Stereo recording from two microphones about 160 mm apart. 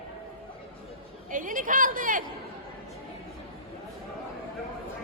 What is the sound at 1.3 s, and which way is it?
Chatter, 55° right (ahead or behind).